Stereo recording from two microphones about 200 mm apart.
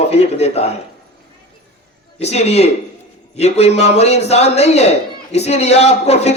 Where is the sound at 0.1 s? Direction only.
30° left (ahead or behind).